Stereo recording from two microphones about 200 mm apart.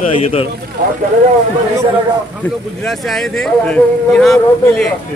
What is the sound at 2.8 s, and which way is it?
Speech, centre (ahead or behind).